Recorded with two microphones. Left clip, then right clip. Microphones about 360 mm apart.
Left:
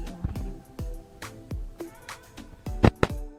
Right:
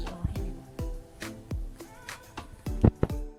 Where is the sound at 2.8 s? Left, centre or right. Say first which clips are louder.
Left 5 dB; left.